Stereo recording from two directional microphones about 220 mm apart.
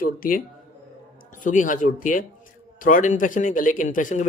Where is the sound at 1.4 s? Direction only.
35° left (ahead or behind).